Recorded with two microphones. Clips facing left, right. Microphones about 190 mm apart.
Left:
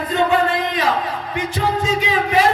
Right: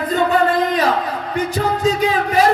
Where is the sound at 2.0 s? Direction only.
40° right (ahead or behind).